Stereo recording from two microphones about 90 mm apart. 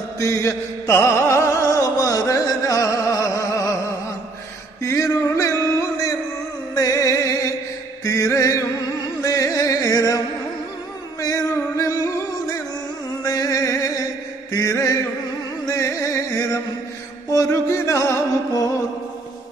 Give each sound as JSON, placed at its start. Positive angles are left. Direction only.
{"t": 0.2, "sound": "music", "side_deg": 35}
{"t": 4.8, "sound": "music", "side_deg": 35}
{"t": 13.2, "sound": "music", "side_deg": 40}